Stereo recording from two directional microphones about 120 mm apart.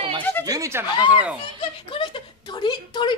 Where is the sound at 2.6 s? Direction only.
35° left (ahead or behind).